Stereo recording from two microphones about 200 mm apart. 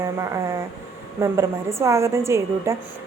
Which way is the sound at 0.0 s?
15° right (ahead or behind).